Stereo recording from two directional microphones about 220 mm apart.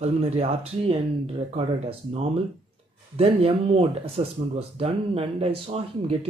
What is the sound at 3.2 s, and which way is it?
Speech, 25° right (ahead or behind).